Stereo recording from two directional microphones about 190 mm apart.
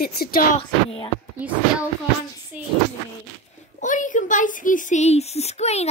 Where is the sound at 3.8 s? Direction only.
40° left (ahead or behind).